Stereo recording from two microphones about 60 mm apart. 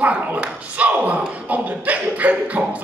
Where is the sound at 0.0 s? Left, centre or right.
Right.